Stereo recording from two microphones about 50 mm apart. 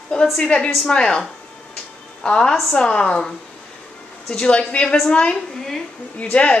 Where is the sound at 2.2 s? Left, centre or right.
Centre.